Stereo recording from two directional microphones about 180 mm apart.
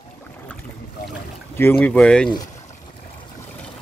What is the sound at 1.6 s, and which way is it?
Speech, 10° left (ahead or behind).